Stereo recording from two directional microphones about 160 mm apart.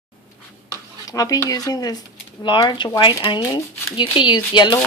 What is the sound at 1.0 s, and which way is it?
Speech, 20° left (ahead or behind).